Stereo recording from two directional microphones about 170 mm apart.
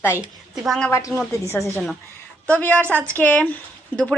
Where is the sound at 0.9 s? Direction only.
15° left (ahead or behind).